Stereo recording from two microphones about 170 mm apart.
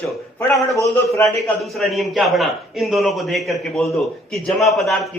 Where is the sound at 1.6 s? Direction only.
Centre (ahead or behind).